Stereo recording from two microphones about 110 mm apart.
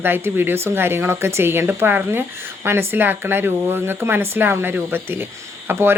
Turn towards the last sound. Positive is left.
turn(degrees=-20)  # may be behind; listen again after turning